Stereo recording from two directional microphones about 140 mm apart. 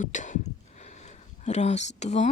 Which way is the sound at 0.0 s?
65° left (ahead or behind).